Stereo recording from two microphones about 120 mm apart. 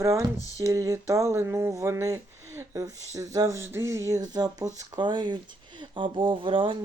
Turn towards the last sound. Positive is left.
turn(degrees=-45)  # may be behind; listen again after turning